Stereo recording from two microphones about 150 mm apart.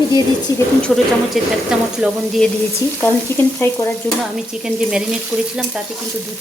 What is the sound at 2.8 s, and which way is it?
Stir, 20° left (ahead or behind).